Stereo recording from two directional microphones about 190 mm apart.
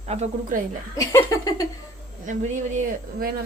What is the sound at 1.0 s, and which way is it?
Speech, 15° left (ahead or behind).